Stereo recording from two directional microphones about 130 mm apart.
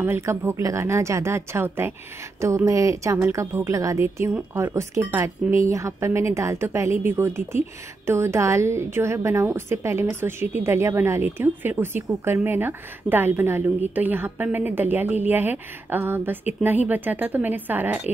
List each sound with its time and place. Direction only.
0.0 s speech: 20° right (ahead or behind)